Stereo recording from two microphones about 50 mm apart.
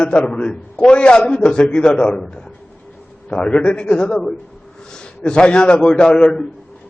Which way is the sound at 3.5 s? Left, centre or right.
Left.